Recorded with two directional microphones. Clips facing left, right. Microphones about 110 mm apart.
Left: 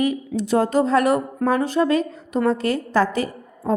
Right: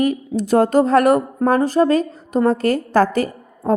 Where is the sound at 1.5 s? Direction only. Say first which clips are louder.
Right 4 dB; 40° right (ahead or behind).